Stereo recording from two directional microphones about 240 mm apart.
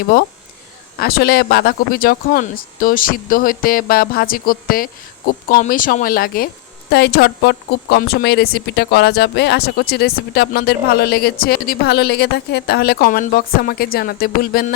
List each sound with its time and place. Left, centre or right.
0.9 s speech: left